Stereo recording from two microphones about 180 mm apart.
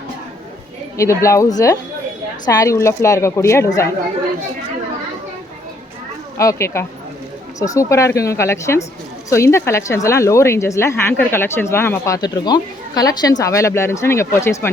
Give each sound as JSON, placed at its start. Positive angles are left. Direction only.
{"t": 0.9, "sound": "speech", "side_deg": 15}
{"t": 6.3, "sound": "speech", "side_deg": 15}